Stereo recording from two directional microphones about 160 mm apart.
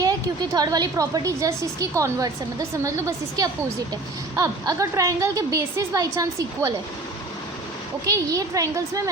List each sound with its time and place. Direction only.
0.0 s a woman's voice: 20° right (ahead or behind)
8.1 s a woman's voice: 20° right (ahead or behind)